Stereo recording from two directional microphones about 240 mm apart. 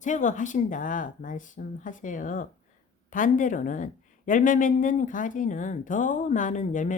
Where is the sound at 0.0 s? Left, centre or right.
Left.